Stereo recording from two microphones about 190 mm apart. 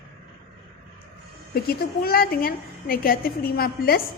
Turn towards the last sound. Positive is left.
turn(degrees=50)  # may be behind; listen again after turning